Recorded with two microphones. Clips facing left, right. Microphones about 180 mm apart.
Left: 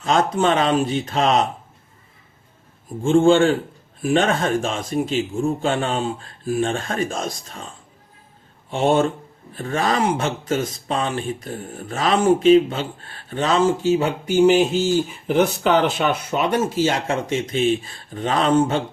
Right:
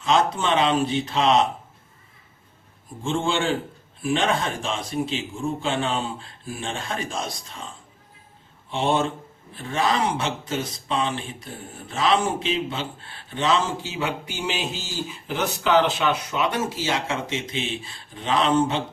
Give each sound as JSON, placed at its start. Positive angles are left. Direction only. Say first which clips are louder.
{"t": 0.0, "sound": "speech", "louder": "left 3 dB", "side_deg": 45}
{"t": 3.0, "sound": "speech", "louder": "left 10 dB", "side_deg": 45}
{"t": 8.7, "sound": "speech", "louder": "left 5 dB", "side_deg": 45}